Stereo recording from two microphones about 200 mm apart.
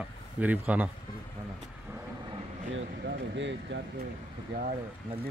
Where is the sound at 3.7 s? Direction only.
65° right (ahead or behind).